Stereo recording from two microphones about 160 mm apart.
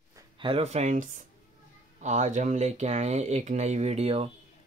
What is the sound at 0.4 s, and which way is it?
Speech, 35° right (ahead or behind).